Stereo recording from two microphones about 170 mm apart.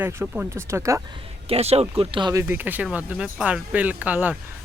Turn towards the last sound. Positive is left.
turn(degrees=-10)  # may be behind; listen again after turning